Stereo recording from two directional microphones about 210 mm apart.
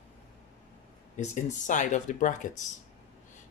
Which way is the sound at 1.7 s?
35° left (ahead or behind).